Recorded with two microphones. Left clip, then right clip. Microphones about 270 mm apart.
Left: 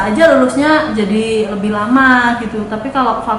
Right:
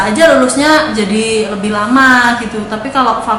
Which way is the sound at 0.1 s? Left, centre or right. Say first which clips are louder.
Even; centre.